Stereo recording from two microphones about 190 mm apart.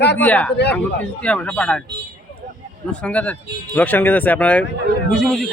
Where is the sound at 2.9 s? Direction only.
5° left (ahead or behind).